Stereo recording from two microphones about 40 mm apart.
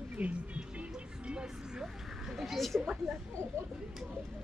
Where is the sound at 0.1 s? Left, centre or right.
Right.